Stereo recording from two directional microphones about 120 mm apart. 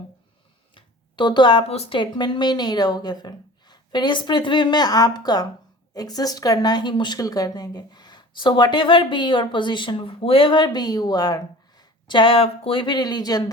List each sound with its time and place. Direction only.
0.8 s a sound: 40° left (ahead or behind)
1.6 s a woman's voice: 60° left (ahead or behind)
2.0 s speech: 40° left (ahead or behind)